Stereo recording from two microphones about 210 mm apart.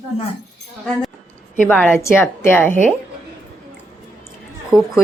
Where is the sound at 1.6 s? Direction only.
5° left (ahead or behind).